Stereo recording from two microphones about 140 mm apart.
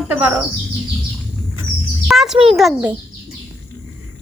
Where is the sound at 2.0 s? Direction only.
Centre (ahead or behind).